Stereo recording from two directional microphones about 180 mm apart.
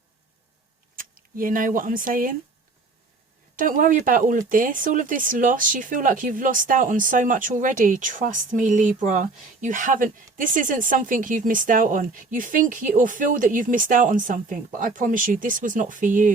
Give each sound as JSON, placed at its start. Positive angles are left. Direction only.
{"t": 0.9, "sound": "speech", "side_deg": -50}
{"t": 3.5, "sound": "speech", "side_deg": -50}